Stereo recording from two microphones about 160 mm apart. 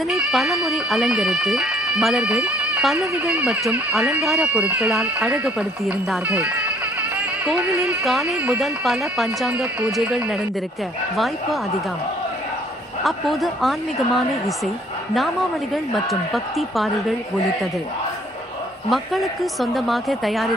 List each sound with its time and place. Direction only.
0.1 s speech: centre (ahead or behind)
7.8 s speech: centre (ahead or behind)
13.0 s speech: centre (ahead or behind)
18.9 s speech: centre (ahead or behind)